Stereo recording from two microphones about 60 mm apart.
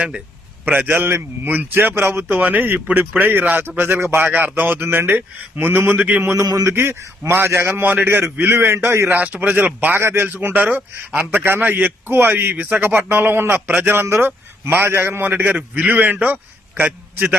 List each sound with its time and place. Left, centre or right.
0.6 s a man's voice: right
6.4 s speech: right
6.7 s speech: right
9.1 s speech: right
10.0 s speech: right
10.5 s speech: right